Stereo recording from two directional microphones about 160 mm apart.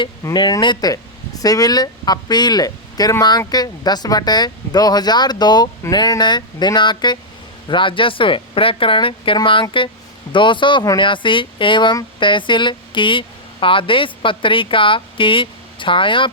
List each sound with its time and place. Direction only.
0.3 s speech: 25° left (ahead or behind)